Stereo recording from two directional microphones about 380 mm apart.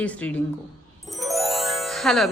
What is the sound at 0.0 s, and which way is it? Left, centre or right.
A woman's voice, centre.